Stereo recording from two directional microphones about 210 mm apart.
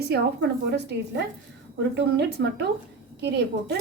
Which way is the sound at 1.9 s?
50° right (ahead or behind).